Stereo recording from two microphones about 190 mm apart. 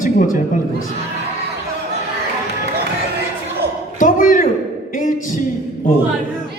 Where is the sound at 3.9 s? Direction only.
45° left (ahead or behind).